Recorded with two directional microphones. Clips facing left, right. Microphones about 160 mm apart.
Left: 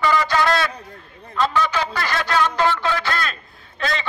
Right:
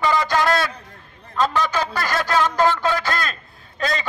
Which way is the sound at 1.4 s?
40° right (ahead or behind).